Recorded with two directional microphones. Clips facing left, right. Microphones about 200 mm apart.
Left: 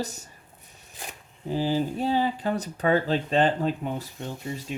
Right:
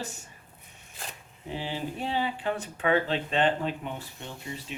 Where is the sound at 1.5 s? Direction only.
40° left (ahead or behind).